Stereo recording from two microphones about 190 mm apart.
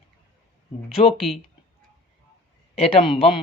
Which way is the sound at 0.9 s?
30° left (ahead or behind).